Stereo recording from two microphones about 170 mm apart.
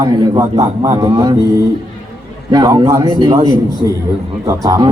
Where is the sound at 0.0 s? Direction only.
20° right (ahead or behind).